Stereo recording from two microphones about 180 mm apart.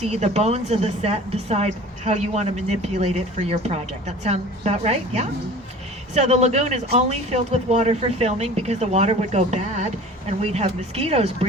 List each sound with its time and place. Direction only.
0.0 s a woman's voice: 40° right (ahead or behind)